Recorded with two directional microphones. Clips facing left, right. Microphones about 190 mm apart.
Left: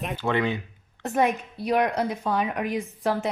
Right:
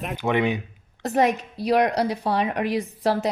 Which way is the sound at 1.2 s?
80° right.